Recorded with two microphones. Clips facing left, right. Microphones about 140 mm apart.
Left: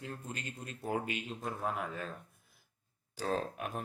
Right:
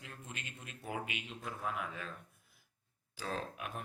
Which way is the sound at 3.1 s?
40° left (ahead or behind).